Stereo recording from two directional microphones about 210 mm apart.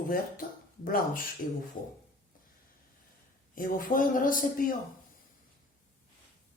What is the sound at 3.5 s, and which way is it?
Speech, 40° left (ahead or behind).